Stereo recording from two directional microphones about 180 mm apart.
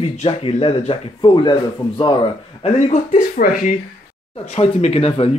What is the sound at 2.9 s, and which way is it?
Speech, 45° left (ahead or behind).